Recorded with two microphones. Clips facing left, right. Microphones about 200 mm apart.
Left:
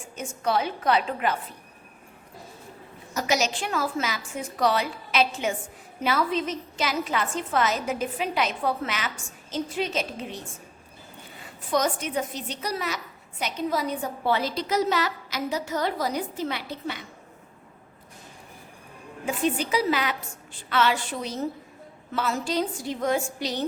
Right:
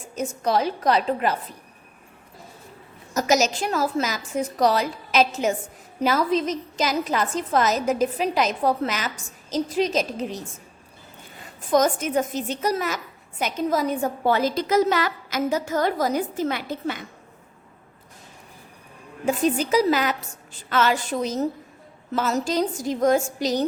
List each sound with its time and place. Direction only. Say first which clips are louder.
0.2 s a woman's voice: right 3 dB; 40° right (ahead or behind)
3.2 s a woman's voice: right 5 dB; 45° right (ahead or behind)
11.7 s a woman's voice: right 5 dB; 45° right (ahead or behind)
19.2 s a woman's voice: right 4 dB; 40° right (ahead or behind)